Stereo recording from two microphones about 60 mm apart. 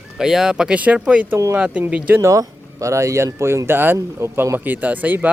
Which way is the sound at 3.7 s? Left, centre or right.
Right.